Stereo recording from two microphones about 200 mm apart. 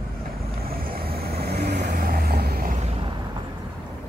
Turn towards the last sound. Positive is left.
turn(degrees=-50)  # may be behind; listen again after turning